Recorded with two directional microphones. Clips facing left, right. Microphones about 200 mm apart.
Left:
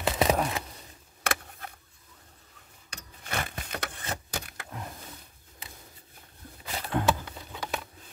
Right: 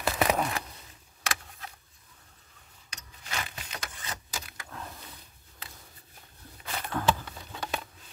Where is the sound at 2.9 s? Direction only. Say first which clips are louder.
Left 4 dB; 55° left (ahead or behind).